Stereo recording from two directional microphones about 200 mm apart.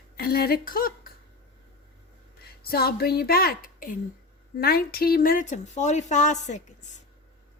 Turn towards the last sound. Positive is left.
turn(degrees=35)  # may be behind; listen again after turning